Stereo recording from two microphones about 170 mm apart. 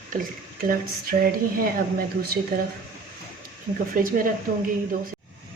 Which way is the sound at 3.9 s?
55° right (ahead or behind).